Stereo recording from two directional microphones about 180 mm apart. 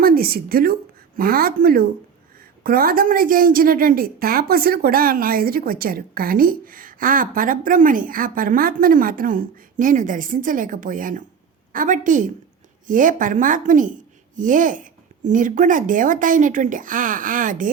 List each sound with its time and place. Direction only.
0.0 s a woman's voice: 55° right (ahead or behind)